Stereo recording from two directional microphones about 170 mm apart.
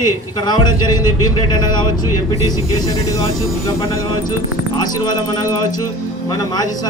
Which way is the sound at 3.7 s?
20° left (ahead or behind).